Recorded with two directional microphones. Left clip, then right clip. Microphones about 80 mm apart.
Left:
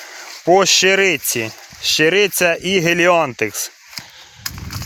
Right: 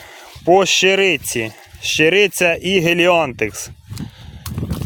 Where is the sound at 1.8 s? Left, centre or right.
Right.